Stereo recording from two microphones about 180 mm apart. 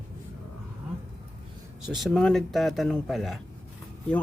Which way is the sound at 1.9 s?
Centre (ahead or behind).